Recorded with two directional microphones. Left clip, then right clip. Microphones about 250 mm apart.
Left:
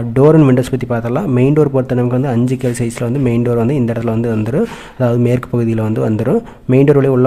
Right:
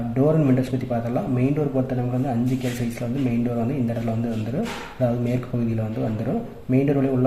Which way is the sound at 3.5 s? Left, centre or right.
Left.